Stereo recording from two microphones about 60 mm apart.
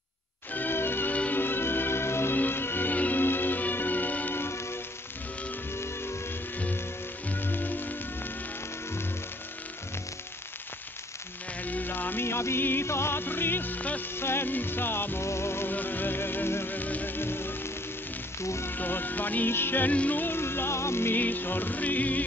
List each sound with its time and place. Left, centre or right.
0.5 s music: left
4.4 s music: left
7.2 s music: left
11.6 s music: left
14.1 s music: left
15.7 s music: left
18.4 s music: left
18.7 s music: left
19.9 s music: left
21.2 s music: left